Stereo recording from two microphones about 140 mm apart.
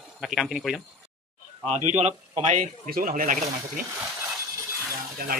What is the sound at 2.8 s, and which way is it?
Speech, 75° right (ahead or behind).